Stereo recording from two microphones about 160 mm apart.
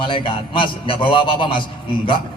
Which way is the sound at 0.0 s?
30° left (ahead or behind).